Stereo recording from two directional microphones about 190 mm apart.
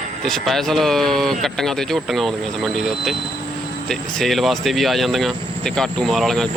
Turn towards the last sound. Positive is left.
turn(degrees=5)  # may be behind; listen again after turning